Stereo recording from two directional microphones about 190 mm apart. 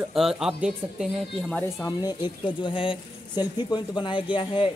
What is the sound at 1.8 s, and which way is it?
Speech, 20° left (ahead or behind).